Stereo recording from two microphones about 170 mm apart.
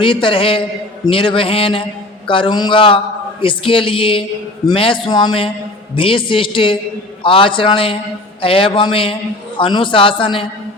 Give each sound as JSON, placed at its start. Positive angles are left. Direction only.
{"t": 0.0, "sound": "a man's voice", "side_deg": 30}